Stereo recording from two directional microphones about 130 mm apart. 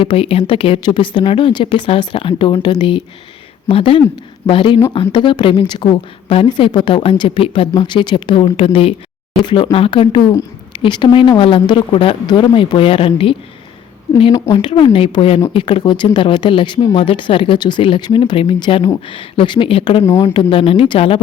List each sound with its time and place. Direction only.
0.0 s speech: 45° left (ahead or behind)
14.5 s speech: 40° left (ahead or behind)
20.0 s speech: 20° left (ahead or behind)
20.2 s speech: 45° left (ahead or behind)